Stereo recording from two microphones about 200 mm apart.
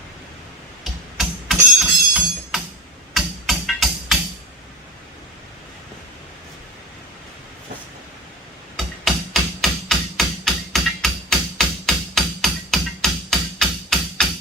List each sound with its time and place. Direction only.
1.1 s music: centre (ahead or behind)
8.7 s music: centre (ahead or behind)